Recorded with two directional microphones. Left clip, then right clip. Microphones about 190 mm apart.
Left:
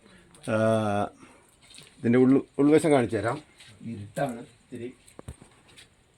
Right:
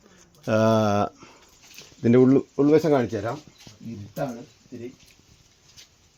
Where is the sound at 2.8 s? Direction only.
15° right (ahead or behind).